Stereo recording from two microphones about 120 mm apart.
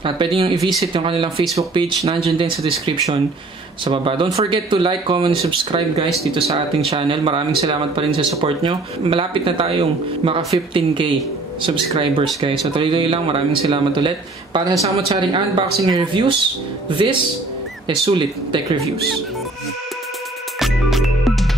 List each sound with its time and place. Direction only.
0.0 s speech: 45° right (ahead or behind)
3.8 s speech: 45° right (ahead or behind)
6.0 s speech: centre (ahead or behind)
6.4 s speech: 50° right (ahead or behind)
18.0 s speech: 45° right (ahead or behind)
20.5 s music: centre (ahead or behind)